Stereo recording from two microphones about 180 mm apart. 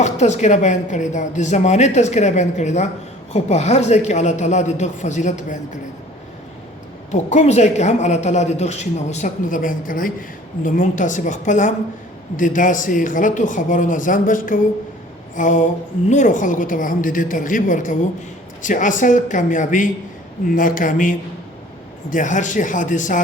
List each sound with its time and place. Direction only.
0.0 s speech: 40° left (ahead or behind)
7.1 s speech: 40° left (ahead or behind)